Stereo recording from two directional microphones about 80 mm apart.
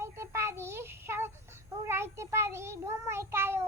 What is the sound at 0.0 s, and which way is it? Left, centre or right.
Child singing, right.